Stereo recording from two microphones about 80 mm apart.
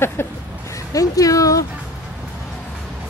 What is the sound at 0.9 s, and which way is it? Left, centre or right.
Speech, left.